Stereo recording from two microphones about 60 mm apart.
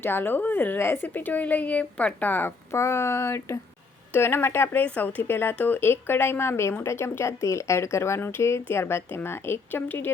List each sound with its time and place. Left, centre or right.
0.0 s speech: left
2.7 s speech: left
4.8 s speech: left